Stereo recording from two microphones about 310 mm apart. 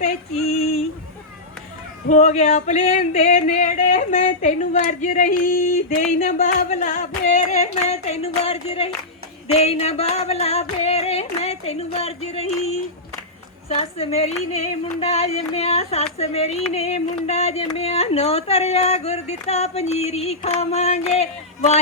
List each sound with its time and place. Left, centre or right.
0.0 s female singing: centre
2.0 s female singing: left
13.7 s female singing: centre